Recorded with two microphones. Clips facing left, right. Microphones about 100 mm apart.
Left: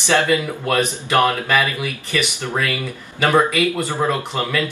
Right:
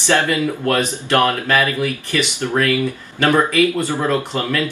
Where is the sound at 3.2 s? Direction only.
15° left (ahead or behind).